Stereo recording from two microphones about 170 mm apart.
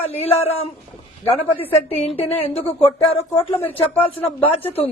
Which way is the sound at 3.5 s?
10° left (ahead or behind).